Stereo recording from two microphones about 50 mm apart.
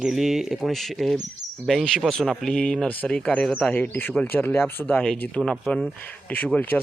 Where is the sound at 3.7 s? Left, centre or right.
Left.